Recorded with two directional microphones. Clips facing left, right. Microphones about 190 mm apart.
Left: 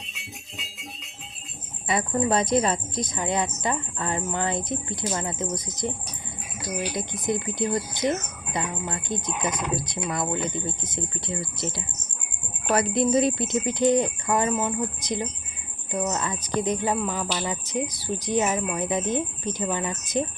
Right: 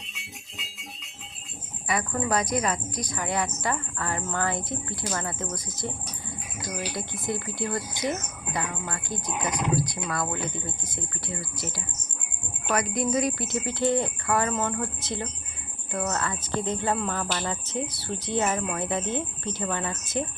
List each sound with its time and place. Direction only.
1.9 s a woman's voice: 20° left (ahead or behind)